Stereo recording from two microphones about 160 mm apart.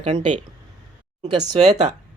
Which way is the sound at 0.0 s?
30° right (ahead or behind).